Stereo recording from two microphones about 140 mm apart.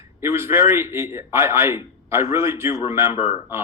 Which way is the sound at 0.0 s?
15° right (ahead or behind).